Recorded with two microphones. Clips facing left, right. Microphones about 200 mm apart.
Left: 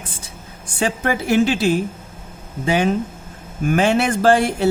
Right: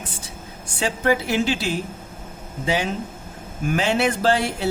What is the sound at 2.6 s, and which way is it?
A woman's voice, 55° left (ahead or behind).